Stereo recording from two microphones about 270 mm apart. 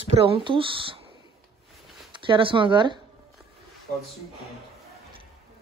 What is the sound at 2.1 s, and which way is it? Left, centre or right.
Speech, centre.